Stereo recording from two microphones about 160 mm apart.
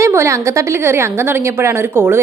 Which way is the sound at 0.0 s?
15° right (ahead or behind).